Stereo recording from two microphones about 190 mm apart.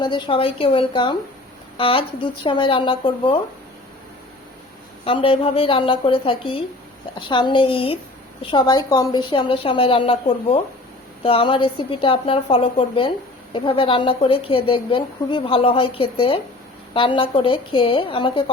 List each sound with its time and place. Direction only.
0.0 s a woman's voice: 25° left (ahead or behind)
5.0 s a woman's voice: 30° left (ahead or behind)